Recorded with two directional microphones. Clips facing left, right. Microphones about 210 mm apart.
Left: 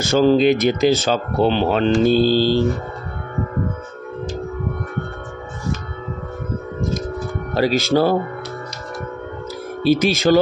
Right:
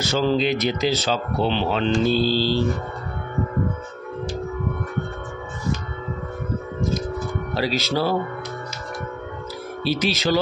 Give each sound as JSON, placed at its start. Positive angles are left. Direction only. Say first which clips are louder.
{"t": 0.0, "sound": "speech", "louder": "left 7 dB", "side_deg": 50}
{"t": 7.5, "sound": "speech", "louder": "left 7 dB", "side_deg": 50}
{"t": 9.8, "sound": "speech", "louder": "left 7 dB", "side_deg": 50}